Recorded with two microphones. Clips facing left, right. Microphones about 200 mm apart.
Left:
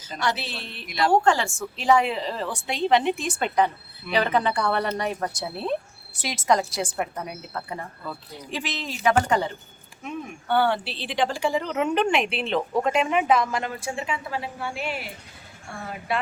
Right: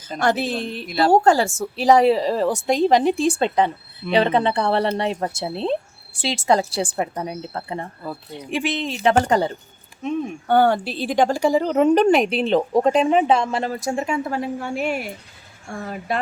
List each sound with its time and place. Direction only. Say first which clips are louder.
0.2 s a woman's voice: right 8 dB; 50° right (ahead or behind)